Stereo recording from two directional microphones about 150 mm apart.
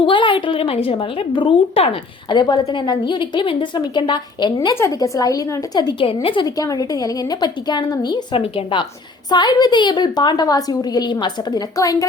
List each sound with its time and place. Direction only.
0.0 s a woman's voice: 35° left (ahead or behind)